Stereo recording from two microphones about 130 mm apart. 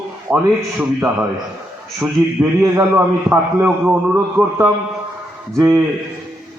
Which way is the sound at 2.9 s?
15° right (ahead or behind).